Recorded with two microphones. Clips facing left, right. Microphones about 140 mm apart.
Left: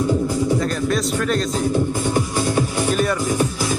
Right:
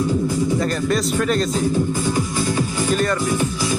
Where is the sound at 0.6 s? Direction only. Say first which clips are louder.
Right 1 dB; centre (ahead or behind).